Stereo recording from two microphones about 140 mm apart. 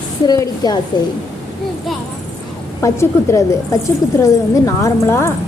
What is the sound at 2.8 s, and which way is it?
A woman's voice, 20° left (ahead or behind).